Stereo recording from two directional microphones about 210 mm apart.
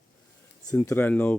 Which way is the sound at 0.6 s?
10° left (ahead or behind).